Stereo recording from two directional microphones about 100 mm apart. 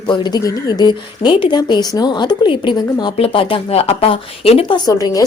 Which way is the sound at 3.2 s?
70° left (ahead or behind).